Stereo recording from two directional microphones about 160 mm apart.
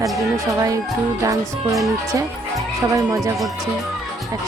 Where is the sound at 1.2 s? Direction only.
20° right (ahead or behind).